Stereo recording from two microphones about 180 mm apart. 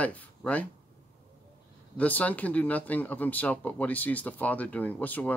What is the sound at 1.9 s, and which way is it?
Speech, 10° left (ahead or behind).